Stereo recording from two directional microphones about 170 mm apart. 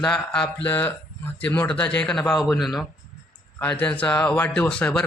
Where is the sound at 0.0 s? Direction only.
5° left (ahead or behind).